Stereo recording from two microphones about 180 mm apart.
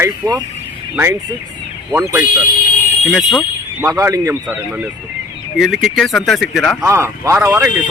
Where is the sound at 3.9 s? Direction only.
20° right (ahead or behind).